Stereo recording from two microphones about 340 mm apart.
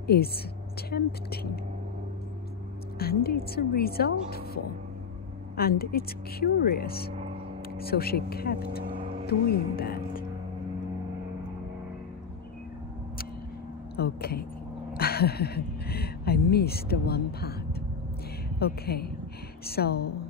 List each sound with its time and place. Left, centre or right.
0.0 s a woman's voice: left
3.0 s speech: left
5.6 s speech: left
13.9 s speech: left